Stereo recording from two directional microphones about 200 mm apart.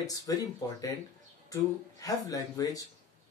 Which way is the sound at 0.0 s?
15° left (ahead or behind).